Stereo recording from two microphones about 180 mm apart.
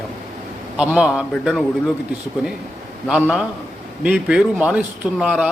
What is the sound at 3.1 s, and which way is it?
A man's voice, 5° right (ahead or behind).